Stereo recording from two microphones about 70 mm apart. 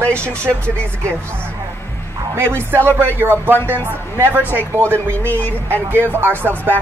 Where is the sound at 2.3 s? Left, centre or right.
Right.